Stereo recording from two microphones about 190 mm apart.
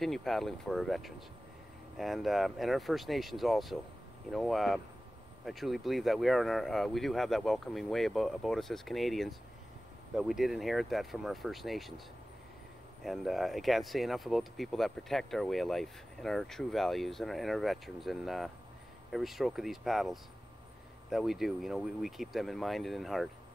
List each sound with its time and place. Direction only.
0.0 s speech: centre (ahead or behind)
13.0 s speech: centre (ahead or behind)